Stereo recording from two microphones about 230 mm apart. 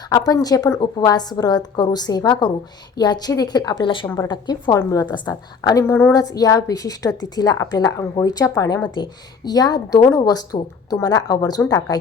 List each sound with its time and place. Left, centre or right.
0.1 s a woman's voice: centre